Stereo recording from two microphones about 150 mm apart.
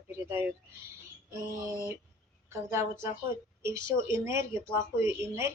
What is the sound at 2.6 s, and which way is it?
A woman's voice, 15° right (ahead or behind).